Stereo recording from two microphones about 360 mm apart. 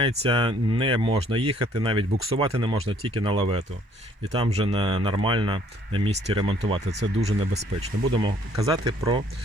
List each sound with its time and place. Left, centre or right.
0.0 s speech: centre